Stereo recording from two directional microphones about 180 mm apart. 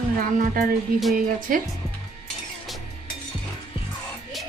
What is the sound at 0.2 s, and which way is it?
Speech, 50° right (ahead or behind).